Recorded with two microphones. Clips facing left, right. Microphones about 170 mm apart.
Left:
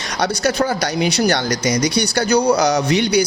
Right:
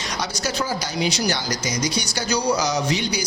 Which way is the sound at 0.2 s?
65° left (ahead or behind).